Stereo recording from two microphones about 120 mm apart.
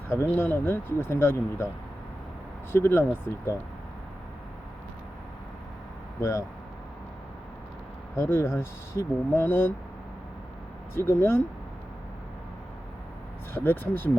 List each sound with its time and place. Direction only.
0.1 s speech: 20° left (ahead or behind)
2.7 s speech: 20° left (ahead or behind)
6.1 s speech: 25° left (ahead or behind)
8.1 s speech: 20° left (ahead or behind)
10.9 s speech: 20° left (ahead or behind)
13.5 s speech: 20° left (ahead or behind)